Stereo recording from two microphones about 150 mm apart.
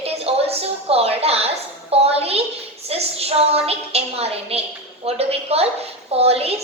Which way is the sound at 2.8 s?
40° right (ahead or behind).